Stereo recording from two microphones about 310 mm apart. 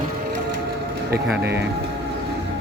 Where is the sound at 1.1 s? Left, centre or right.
Right.